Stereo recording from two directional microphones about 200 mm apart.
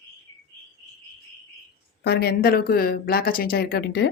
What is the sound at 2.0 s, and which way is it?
Speech, 55° left (ahead or behind).